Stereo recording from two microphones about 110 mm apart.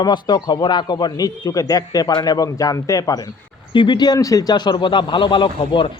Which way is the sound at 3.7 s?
45° left (ahead or behind).